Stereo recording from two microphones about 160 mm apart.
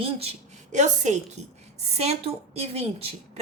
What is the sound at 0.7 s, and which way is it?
A woman's voice, 50° right (ahead or behind).